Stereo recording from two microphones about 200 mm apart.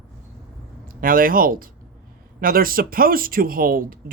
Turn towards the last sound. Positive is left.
turn(degrees=-45)  # may be behind; listen again after turning